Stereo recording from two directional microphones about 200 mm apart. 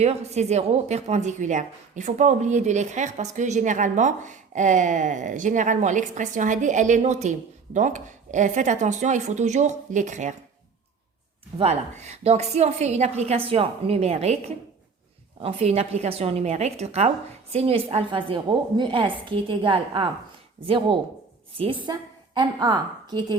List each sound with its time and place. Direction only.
0.0 s a woman's voice: 35° right (ahead or behind)
11.5 s a woman's voice: 30° right (ahead or behind)